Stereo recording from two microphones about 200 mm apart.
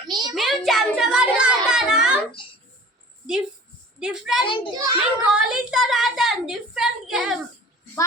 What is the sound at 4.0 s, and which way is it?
Speech, 5° right (ahead or behind).